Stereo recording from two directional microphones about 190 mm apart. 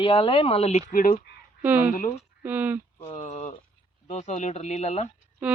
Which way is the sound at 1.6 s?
10° right (ahead or behind).